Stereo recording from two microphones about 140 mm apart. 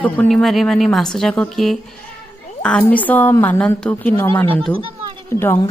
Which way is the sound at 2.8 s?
10° left (ahead or behind).